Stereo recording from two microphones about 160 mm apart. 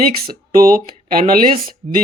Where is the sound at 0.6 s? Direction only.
60° right (ahead or behind).